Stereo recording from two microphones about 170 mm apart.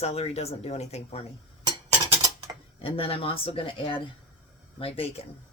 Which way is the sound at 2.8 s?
35° left (ahead or behind).